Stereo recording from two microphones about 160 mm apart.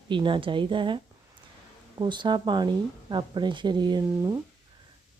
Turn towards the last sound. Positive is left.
turn(degrees=-25)  # may be behind; listen again after turning